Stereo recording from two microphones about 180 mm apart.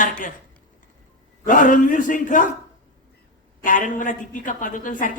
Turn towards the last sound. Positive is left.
turn(degrees=45)  # may be behind; listen again after turning